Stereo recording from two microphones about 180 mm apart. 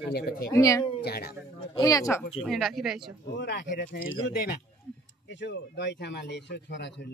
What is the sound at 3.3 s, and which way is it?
Speech, 70° left (ahead or behind).